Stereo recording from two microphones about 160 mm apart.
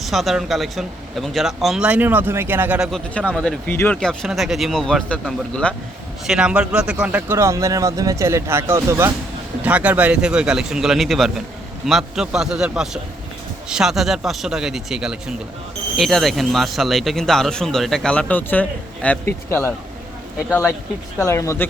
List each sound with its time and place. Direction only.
0.0 s speech: centre (ahead or behind)
3.2 s speech: 5° left (ahead or behind)
6.2 s speech: 5° right (ahead or behind); by 21.7 s 15° left (ahead or behind)